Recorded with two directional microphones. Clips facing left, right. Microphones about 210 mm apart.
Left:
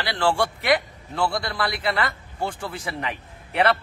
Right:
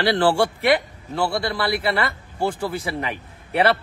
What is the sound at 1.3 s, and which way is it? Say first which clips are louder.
A man's voice: right 4 dB; 30° right (ahead or behind).